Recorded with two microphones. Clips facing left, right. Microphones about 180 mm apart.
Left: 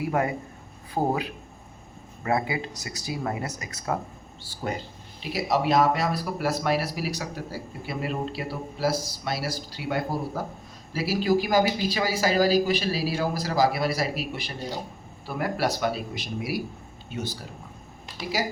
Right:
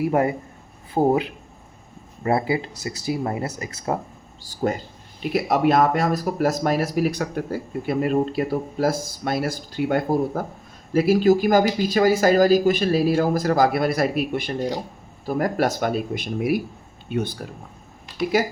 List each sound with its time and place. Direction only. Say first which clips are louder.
0.1 s speech: right 2 dB; 30° right (ahead or behind)
2.2 s speech: right 5 dB; 30° right (ahead or behind)
4.5 s speech: even; 40° right (ahead or behind)
5.2 s speech: right 6 dB; 55° right (ahead or behind)